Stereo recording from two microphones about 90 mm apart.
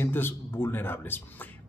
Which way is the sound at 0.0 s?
25° left (ahead or behind).